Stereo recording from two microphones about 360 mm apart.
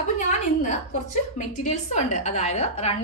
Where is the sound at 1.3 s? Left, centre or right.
Centre.